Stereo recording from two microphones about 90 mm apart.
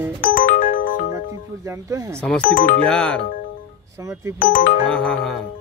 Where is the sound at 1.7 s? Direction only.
35° right (ahead or behind).